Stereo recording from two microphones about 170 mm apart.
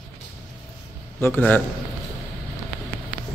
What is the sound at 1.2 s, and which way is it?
Speech, 10° left (ahead or behind).